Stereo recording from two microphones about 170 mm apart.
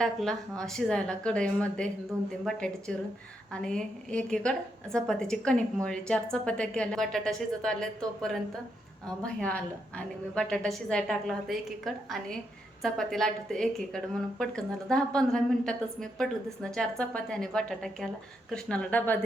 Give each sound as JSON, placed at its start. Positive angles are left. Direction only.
{"t": 0.0, "sound": "a woman's voice", "side_deg": 5}